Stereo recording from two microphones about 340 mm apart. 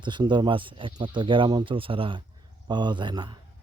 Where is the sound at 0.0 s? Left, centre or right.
Centre.